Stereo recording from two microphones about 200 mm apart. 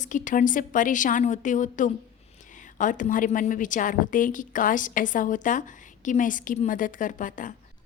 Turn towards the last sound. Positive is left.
turn(degrees=40)  # may be behind; listen again after turning